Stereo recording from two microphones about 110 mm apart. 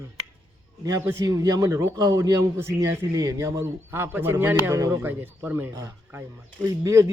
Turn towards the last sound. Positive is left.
turn(degrees=-30)  # may be behind; listen again after turning